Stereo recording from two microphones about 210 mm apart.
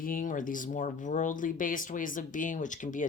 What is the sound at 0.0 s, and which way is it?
Speech, 40° left (ahead or behind).